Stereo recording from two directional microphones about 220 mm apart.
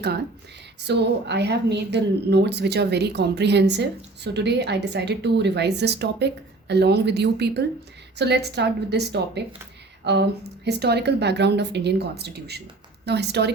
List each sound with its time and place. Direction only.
0.9 s a woman's voice: 50° right (ahead or behind)